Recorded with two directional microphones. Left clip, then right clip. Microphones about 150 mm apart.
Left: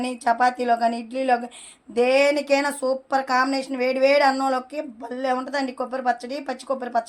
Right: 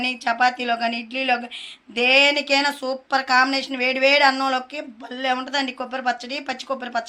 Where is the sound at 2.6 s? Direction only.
25° left (ahead or behind).